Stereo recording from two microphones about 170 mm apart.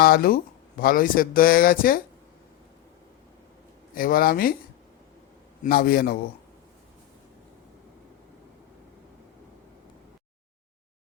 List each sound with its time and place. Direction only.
0.0 s speech: 65° left (ahead or behind)
3.9 s speech: 60° left (ahead or behind)
5.6 s speech: 65° left (ahead or behind)